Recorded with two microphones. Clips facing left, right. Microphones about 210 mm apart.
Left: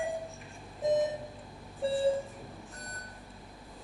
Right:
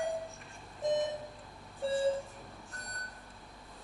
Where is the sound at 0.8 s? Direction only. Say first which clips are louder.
Left 4 dB; centre (ahead or behind).